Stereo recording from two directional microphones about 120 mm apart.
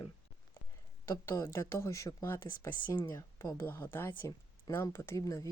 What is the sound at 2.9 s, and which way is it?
Speech, 30° left (ahead or behind).